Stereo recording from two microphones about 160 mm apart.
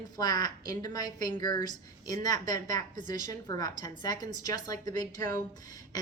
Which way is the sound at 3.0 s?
55° right (ahead or behind).